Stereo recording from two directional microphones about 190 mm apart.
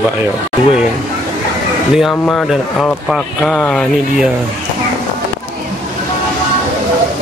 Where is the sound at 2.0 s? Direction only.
Centre (ahead or behind).